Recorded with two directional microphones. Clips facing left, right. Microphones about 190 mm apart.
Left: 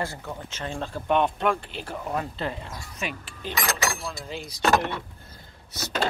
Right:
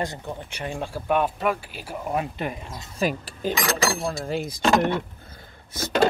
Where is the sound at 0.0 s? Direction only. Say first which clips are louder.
Right 2 dB; 15° right (ahead or behind).